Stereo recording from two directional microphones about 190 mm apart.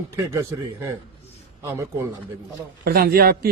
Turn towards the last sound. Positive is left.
turn(degrees=-55)  # may be behind; listen again after turning